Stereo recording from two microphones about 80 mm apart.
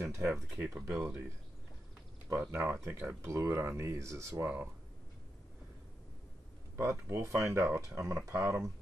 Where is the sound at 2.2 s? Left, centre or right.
Right.